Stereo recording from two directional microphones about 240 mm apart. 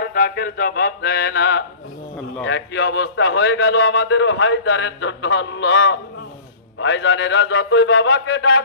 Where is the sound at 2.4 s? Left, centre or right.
Left.